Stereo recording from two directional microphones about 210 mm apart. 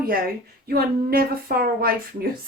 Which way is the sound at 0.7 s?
45° right (ahead or behind).